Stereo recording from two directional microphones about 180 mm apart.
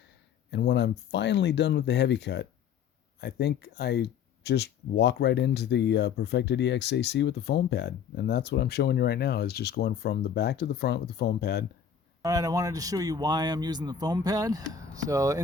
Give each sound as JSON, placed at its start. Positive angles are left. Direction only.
{"t": 0.5, "sound": "speech", "side_deg": 75}
{"t": 12.2, "sound": "speech", "side_deg": -20}